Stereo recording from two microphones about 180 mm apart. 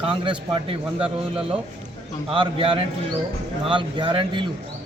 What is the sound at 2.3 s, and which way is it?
A man's voice, 30° right (ahead or behind).